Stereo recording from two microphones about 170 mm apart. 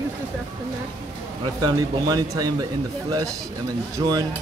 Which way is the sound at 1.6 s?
20° right (ahead or behind).